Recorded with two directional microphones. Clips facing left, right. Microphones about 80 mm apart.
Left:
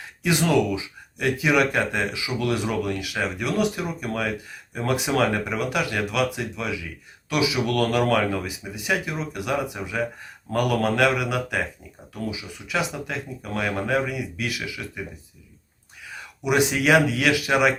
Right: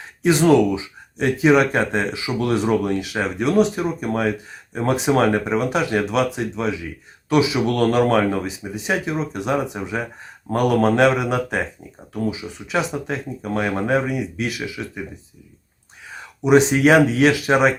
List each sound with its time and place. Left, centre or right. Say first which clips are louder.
0.2 s speech: right 6 dB; right
16.0 s speech: right 7 dB; right